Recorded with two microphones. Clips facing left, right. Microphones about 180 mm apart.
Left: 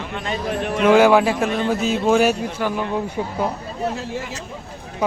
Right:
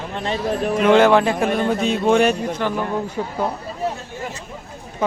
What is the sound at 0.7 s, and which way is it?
A man's voice, 5° left (ahead or behind).